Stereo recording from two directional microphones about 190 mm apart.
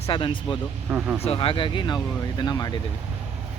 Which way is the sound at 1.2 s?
30° left (ahead or behind).